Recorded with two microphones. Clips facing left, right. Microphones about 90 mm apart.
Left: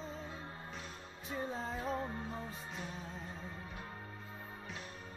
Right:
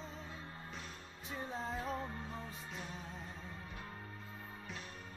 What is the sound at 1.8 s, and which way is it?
Music, 15° left (ahead or behind).